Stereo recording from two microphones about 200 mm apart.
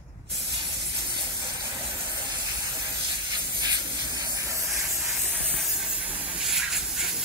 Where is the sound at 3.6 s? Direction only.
20° right (ahead or behind).